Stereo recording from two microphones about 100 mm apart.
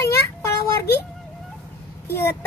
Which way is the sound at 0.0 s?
25° left (ahead or behind).